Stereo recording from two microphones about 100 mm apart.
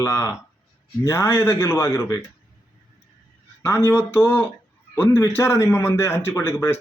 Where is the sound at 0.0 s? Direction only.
30° left (ahead or behind).